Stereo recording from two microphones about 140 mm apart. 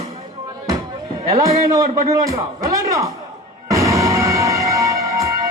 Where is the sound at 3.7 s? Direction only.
25° right (ahead or behind).